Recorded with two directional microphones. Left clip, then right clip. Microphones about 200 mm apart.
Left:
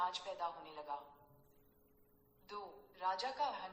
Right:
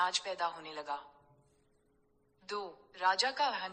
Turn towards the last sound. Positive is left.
turn(degrees=-40)  # may be behind; listen again after turning